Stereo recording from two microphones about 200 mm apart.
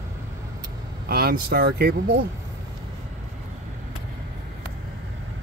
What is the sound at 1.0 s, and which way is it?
Speech, 50° right (ahead or behind).